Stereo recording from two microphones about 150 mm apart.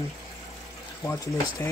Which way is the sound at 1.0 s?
20° left (ahead or behind).